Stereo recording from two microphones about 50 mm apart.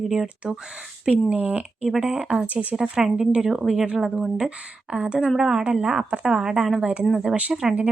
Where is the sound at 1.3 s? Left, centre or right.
Right.